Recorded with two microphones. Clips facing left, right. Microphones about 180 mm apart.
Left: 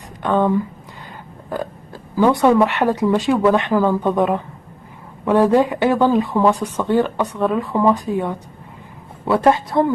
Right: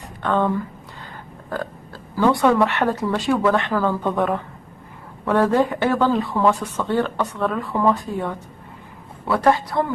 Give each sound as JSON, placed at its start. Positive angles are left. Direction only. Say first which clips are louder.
{"t": 0.2, "sound": "speech", "louder": "left 3 dB", "side_deg": 10}
{"t": 2.1, "sound": "a woman's voice", "louder": "left 3 dB", "side_deg": 15}